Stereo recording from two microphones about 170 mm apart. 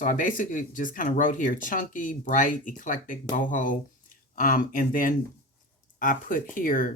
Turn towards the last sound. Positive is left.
turn(degrees=55)  # may be behind; listen again after turning